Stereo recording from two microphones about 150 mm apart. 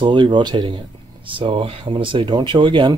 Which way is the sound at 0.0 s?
30° right (ahead or behind).